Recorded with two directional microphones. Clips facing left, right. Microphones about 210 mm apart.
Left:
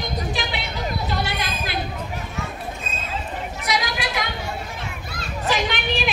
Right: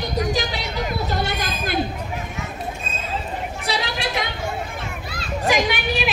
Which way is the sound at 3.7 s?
30° right (ahead or behind).